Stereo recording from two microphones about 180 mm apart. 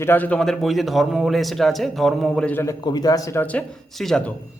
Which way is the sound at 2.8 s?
20° left (ahead or behind).